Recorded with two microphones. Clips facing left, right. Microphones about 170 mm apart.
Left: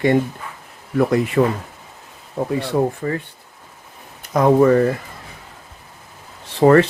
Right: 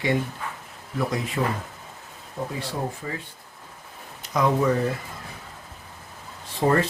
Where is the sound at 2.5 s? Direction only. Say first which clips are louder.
Left 11 dB; 60° left (ahead or behind).